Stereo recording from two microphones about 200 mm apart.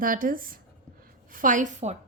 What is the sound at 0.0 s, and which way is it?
A woman's voice, 45° right (ahead or behind).